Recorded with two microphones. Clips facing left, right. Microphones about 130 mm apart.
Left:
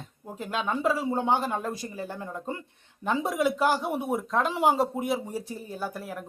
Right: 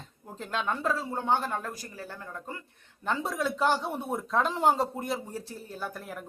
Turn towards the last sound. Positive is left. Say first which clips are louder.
# left 3 dB
turn(degrees=5)  # may be behind; listen again after turning